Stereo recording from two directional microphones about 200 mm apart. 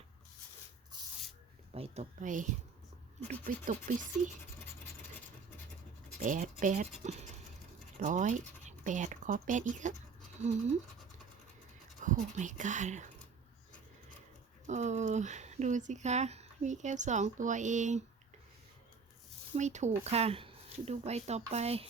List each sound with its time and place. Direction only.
1.7 s speech: 30° right (ahead or behind)
6.1 s speech: 45° right (ahead or behind)
12.0 s speech: 40° right (ahead or behind)
14.7 s speech: 35° right (ahead or behind)
19.5 s speech: 35° right (ahead or behind)